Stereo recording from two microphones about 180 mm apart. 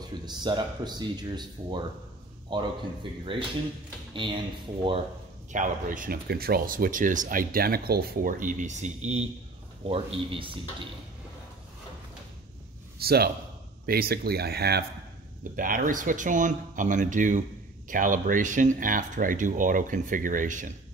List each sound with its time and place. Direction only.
0.2 s speech: 25° right (ahead or behind)
5.5 s speech: 45° right (ahead or behind); by 10.5 s 30° right (ahead or behind)
13.0 s speech: 60° right (ahead or behind)
15.5 s speech: 50° right (ahead or behind)